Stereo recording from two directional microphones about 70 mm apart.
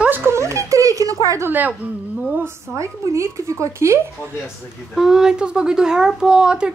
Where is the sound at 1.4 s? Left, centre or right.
Right.